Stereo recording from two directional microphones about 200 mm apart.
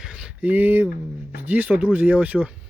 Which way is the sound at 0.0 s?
5° right (ahead or behind).